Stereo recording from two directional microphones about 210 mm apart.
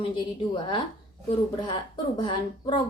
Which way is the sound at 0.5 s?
20° left (ahead or behind).